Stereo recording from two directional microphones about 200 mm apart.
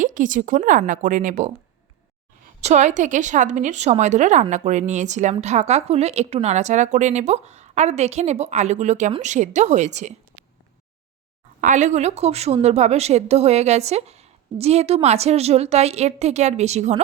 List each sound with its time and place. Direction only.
0.0 s a woman's voice: 40° right (ahead or behind)
2.6 s a woman's voice: 35° right (ahead or behind)
11.6 s a woman's voice: 40° right (ahead or behind)